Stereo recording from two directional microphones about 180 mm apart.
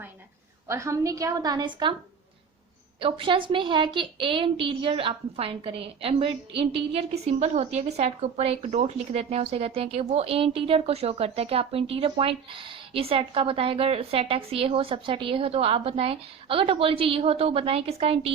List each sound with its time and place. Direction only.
0.7 s a woman's voice: 15° right (ahead or behind)
3.0 s a woman's voice: 30° right (ahead or behind)